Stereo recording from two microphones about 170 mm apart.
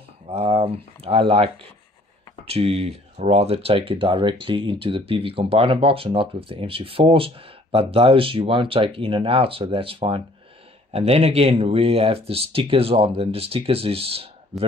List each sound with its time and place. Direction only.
0.3 s speech: 35° right (ahead or behind)